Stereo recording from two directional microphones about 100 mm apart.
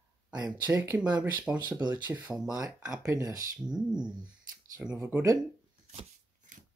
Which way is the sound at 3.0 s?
35° right (ahead or behind).